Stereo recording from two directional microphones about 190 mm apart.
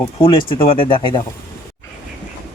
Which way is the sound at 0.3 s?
30° left (ahead or behind).